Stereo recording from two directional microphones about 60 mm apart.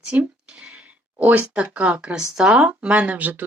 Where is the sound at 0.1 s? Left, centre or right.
Right.